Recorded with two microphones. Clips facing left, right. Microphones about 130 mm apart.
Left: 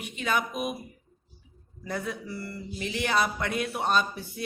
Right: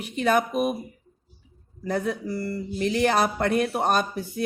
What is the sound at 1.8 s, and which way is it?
A woman's voice, 45° right (ahead or behind).